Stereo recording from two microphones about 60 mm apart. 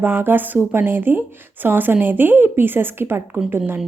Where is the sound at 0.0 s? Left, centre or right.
Right.